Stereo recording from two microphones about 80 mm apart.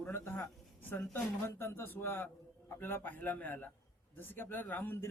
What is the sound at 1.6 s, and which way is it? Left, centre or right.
A man's voice, left.